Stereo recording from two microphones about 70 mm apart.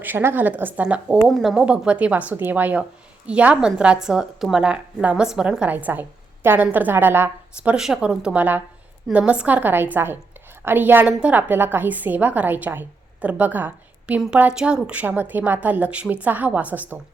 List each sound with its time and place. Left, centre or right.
0.0 s a woman's voice: right; by 1.2 s centre
1.3 s speech: centre
1.6 s a woman's voice: centre
8.0 s a woman's voice: centre
8.4 s a woman's voice: right
15.0 s a woman's voice: right